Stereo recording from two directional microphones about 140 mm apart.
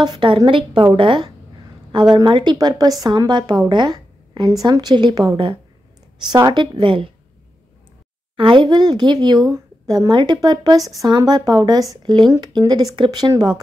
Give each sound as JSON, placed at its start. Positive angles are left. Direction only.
{"t": 0.0, "sound": "a woman's voice", "side_deg": -35}
{"t": 8.4, "sound": "a woman's voice", "side_deg": -35}